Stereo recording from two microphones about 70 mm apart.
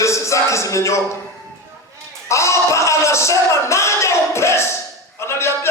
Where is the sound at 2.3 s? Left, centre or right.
Left.